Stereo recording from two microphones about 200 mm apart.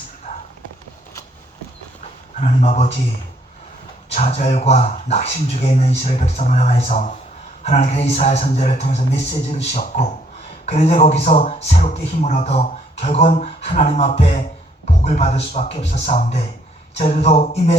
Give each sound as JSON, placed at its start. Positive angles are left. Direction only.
{"t": 2.4, "sound": "speech", "side_deg": 35}
{"t": 4.1, "sound": "speech", "side_deg": 30}